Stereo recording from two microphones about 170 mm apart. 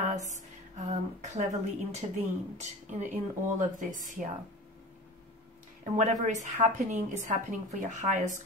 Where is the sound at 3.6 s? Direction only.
50° right (ahead or behind).